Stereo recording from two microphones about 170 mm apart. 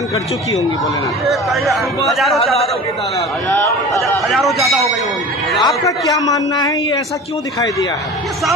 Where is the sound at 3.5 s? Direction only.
10° left (ahead or behind).